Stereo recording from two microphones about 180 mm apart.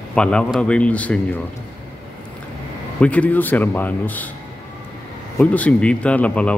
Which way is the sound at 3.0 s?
10° left (ahead or behind).